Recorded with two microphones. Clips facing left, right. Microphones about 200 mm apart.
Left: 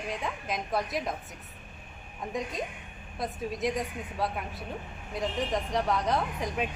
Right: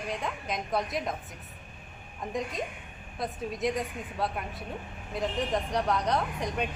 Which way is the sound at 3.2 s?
Centre (ahead or behind).